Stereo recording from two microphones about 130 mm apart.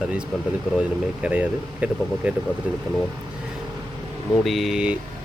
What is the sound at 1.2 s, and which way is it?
Speech, 10° right (ahead or behind).